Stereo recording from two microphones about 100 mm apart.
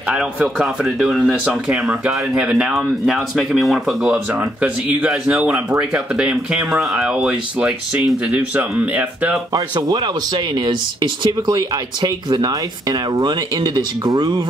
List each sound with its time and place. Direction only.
0.0 s speech: 10° right (ahead or behind)
9.5 s speech: 45° right (ahead or behind)